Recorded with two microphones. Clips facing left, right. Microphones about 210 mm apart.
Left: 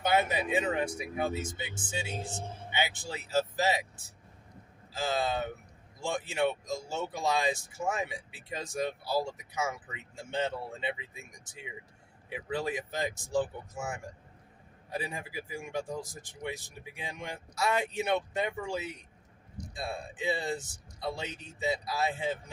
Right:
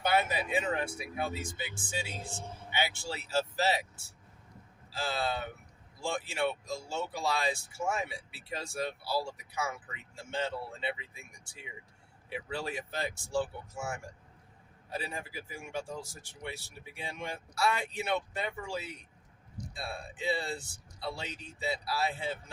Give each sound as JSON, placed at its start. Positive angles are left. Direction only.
{"t": 0.0, "sound": "speech", "side_deg": 20}